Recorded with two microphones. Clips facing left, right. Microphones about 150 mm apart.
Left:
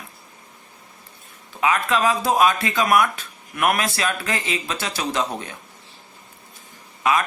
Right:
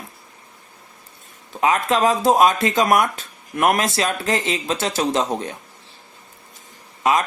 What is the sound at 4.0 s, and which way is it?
Speech, 30° right (ahead or behind).